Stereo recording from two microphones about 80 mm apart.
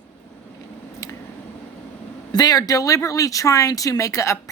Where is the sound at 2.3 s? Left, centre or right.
Left.